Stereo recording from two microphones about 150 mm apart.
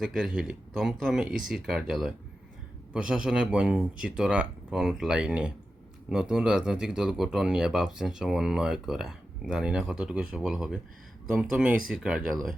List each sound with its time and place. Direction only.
0.0 s speech: 5° right (ahead or behind)